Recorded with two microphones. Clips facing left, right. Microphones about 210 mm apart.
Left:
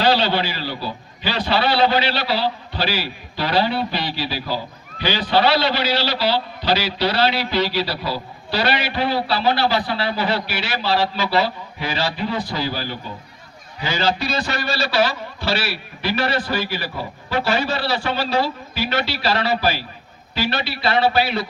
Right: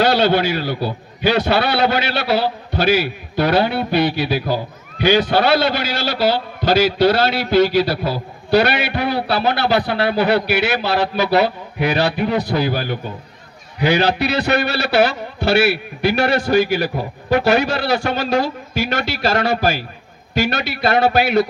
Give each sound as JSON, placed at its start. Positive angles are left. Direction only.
{"t": 0.0, "sound": "a man's voice", "side_deg": -50}